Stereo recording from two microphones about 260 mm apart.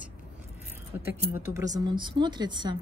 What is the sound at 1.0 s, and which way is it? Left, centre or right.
Speech, centre.